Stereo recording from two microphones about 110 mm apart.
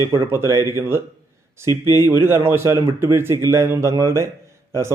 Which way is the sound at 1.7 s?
35° left (ahead or behind).